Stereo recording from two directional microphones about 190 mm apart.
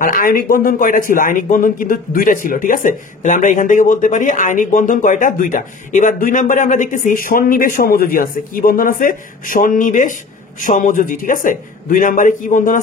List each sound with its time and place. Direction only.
0.0 s speech: 45° left (ahead or behind)